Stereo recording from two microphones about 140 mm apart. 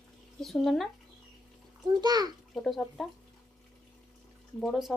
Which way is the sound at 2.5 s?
5° left (ahead or behind).